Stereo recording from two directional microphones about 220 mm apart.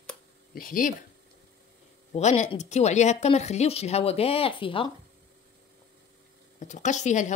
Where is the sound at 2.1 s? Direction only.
30° left (ahead or behind).